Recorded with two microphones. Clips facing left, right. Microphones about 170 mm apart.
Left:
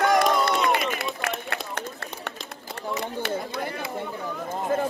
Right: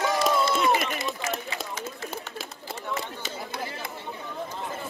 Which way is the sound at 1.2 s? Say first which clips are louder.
Left 1 dB; 60° left (ahead or behind).